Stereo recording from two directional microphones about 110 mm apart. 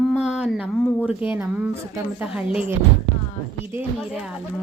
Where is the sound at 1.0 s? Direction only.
15° right (ahead or behind).